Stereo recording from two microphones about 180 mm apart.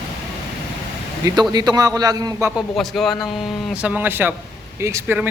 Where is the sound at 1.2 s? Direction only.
20° right (ahead or behind).